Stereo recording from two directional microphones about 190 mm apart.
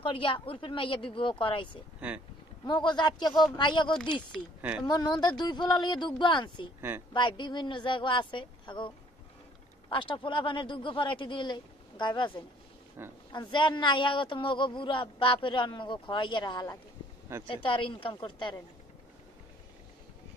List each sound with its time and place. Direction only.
0.0 s speech: 25° left (ahead or behind)
2.0 s speech: 10° right (ahead or behind)
2.6 s speech: 25° left (ahead or behind)
4.6 s speech: 10° right (ahead or behind)
4.8 s speech: 20° left (ahead or behind)
13.0 s speech: 10° right (ahead or behind)
13.3 s speech: 25° left (ahead or behind)
17.3 s speech: 15° right (ahead or behind)
17.6 s speech: 25° left (ahead or behind)